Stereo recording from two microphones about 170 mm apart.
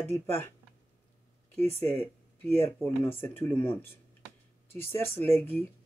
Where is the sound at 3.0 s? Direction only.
15° left (ahead or behind).